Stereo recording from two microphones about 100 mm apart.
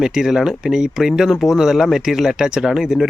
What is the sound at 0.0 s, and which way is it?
Speech, 5° right (ahead or behind).